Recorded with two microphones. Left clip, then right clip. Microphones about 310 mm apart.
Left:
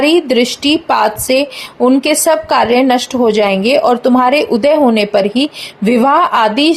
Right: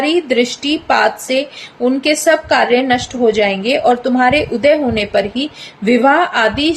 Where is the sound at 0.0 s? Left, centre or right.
Centre.